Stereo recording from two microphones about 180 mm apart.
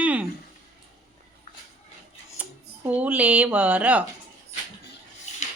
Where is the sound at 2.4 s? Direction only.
10° right (ahead or behind).